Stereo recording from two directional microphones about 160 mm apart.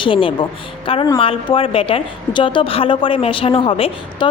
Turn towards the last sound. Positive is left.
turn(degrees=35)  # may be behind; listen again after turning